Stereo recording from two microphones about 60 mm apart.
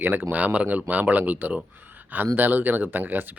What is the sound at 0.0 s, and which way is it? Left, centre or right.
Speech, right.